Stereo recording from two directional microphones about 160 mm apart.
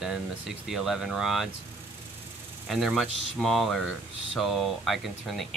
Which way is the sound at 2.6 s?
Centre (ahead or behind).